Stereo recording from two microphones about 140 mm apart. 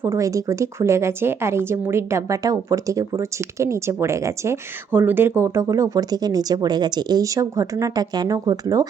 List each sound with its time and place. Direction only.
0.0 s speech: 20° right (ahead or behind)